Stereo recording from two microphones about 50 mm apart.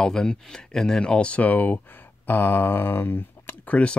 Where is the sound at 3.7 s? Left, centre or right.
Left.